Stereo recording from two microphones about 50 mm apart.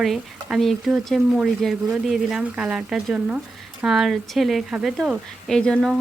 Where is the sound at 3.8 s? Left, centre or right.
Centre.